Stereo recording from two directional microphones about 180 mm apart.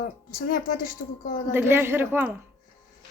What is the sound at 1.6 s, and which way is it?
Speech, 15° right (ahead or behind).